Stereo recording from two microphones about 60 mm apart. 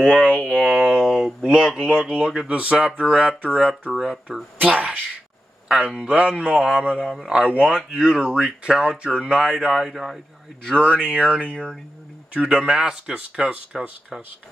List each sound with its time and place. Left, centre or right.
0.0 s speech: centre
3.9 s speech: centre
4.6 s speech: right; by 10.1 s centre
10.8 s speech: right
11.4 s speech: centre
12.4 s speech: centre